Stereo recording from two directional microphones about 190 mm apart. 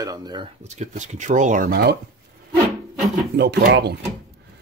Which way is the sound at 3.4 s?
60° right (ahead or behind).